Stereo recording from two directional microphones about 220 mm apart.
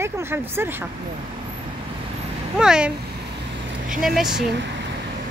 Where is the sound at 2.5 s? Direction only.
5° right (ahead or behind).